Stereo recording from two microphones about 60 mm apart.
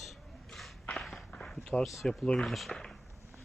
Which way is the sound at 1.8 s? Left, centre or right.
Centre.